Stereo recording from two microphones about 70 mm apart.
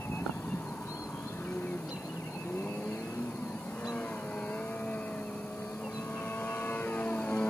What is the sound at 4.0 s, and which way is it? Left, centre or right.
Vehicle, centre.